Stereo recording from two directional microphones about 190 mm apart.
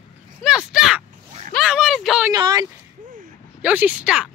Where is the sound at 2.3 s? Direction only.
20° right (ahead or behind).